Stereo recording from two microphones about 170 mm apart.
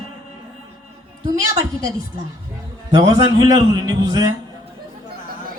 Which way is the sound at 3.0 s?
20° right (ahead or behind).